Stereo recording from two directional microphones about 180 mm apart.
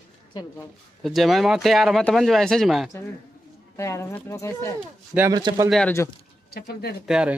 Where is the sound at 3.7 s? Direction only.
15° left (ahead or behind).